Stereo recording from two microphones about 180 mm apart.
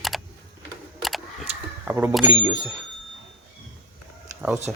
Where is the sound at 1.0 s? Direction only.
Centre (ahead or behind).